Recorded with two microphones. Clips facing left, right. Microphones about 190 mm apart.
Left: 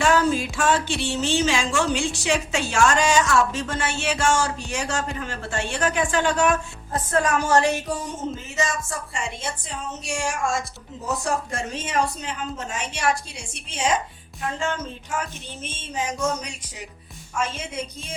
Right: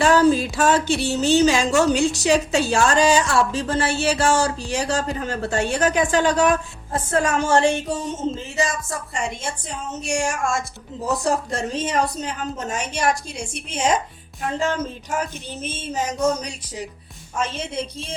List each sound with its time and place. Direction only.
0.0 s a woman's voice: 35° right (ahead or behind)
11.1 s speech: 35° right (ahead or behind)